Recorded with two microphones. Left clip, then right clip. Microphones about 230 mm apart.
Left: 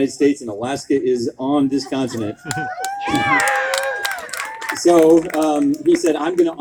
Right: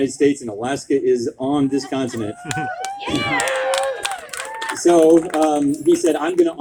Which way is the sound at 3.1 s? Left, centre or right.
Centre.